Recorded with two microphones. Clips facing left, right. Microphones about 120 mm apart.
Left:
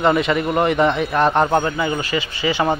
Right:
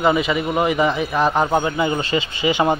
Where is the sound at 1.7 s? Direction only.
25° right (ahead or behind).